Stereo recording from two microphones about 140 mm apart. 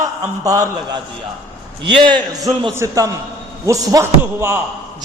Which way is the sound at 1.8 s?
35° right (ahead or behind).